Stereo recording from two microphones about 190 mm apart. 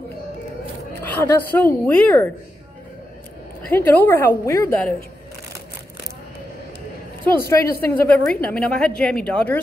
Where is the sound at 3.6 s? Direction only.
10° left (ahead or behind).